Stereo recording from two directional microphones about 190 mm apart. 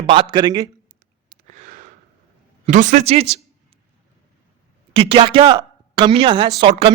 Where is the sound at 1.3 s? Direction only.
40° right (ahead or behind).